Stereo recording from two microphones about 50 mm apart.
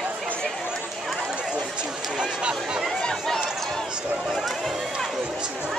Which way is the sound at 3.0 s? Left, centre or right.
Centre.